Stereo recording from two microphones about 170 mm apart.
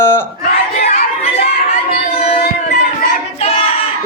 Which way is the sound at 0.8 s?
45° left (ahead or behind).